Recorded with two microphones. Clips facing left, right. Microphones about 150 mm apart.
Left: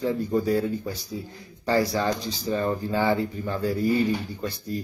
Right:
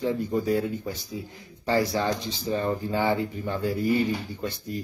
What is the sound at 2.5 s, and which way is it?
Speech, 25° right (ahead or behind).